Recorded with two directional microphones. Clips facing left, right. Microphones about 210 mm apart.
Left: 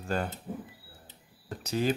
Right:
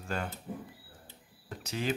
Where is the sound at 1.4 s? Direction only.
40° left (ahead or behind).